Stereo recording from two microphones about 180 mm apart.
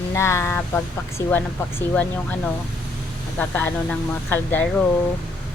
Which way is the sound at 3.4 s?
10° left (ahead or behind).